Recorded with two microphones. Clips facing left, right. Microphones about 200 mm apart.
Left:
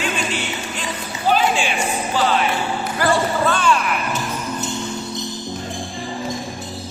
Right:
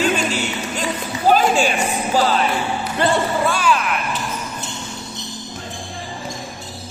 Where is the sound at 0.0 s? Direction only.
40° right (ahead or behind).